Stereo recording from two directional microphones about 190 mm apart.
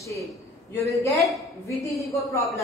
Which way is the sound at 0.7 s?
15° left (ahead or behind).